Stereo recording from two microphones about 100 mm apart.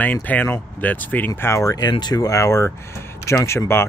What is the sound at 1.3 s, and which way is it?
Speech, 30° left (ahead or behind).